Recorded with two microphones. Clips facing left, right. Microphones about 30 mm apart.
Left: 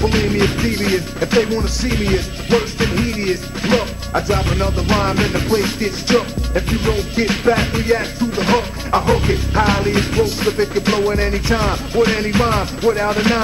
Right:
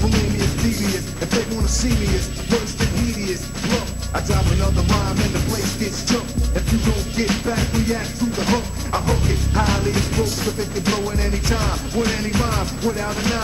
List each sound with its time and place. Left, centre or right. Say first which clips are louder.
0.0 s music: left 5 dB; left
3.0 s speech: left 4 dB; left
5.0 s speech: left 5 dB; left
7.4 s speech: left 6 dB; left